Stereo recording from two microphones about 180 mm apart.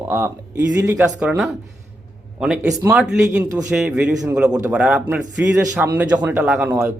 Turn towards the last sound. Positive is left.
turn(degrees=-10)  # may be behind; listen again after turning